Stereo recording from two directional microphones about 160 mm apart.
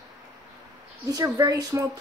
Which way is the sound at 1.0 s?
20° right (ahead or behind).